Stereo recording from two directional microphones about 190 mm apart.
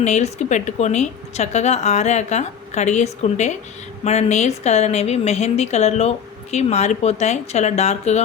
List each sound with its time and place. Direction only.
0.0 s speech: 35° left (ahead or behind)